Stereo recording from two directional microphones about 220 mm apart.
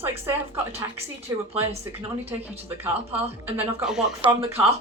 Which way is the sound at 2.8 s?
10° right (ahead or behind).